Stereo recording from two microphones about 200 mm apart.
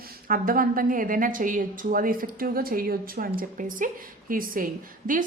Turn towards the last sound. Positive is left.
turn(degrees=-40)  # may be behind; listen again after turning